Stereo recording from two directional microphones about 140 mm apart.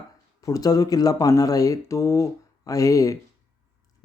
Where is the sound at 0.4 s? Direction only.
25° left (ahead or behind).